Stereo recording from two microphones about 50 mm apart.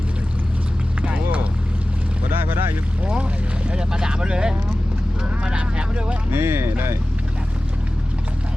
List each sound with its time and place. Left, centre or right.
1.0 s run: right
2.3 s vehicle: right
3.0 s speech: right
5.2 s a sound: centre
6.3 s speech: right